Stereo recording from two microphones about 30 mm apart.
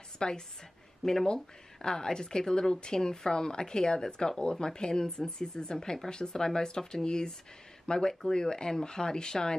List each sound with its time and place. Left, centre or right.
0.2 s speech: left